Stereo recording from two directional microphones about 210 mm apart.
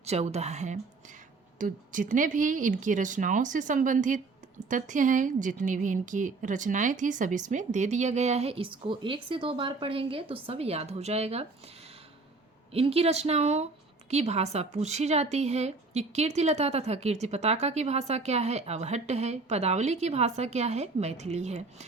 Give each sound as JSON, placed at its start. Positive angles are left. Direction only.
{"t": 0.0, "sound": "a woman's voice", "side_deg": -30}
{"t": 12.7, "sound": "a woman's voice", "side_deg": -30}